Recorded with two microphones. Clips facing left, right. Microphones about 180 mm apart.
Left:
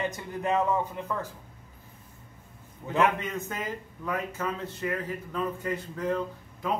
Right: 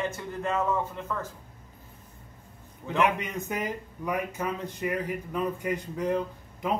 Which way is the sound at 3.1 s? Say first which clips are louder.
Right 2 dB; 15° right (ahead or behind).